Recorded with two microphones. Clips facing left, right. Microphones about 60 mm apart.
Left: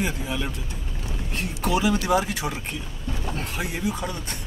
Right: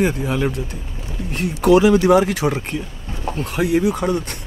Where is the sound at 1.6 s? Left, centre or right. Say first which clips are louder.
Right 11 dB; right.